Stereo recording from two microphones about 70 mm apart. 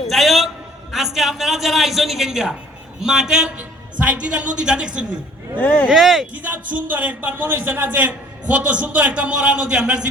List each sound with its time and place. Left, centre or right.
0.1 s a sound: centre
3.0 s speech: centre
5.5 s speech: left
5.9 s speech: centre
6.3 s a man's voice: right